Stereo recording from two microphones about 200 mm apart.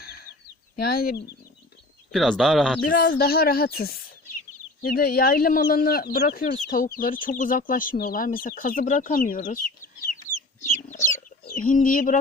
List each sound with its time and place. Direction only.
0.0 s bird: 50° left (ahead or behind)
0.8 s speech: 50° left (ahead or behind)
2.1 s speech: centre (ahead or behind)
2.9 s speech: 50° left (ahead or behind)
11.1 s chicken: 45° left (ahead or behind)